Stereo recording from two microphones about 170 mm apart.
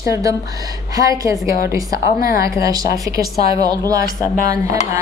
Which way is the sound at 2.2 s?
60° left (ahead or behind).